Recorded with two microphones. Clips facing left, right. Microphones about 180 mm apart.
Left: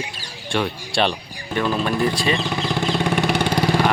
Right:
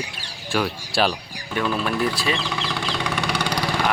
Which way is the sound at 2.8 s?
50° left (ahead or behind).